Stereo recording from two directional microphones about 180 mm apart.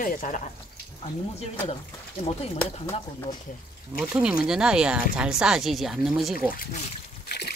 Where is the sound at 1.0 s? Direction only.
35° left (ahead or behind).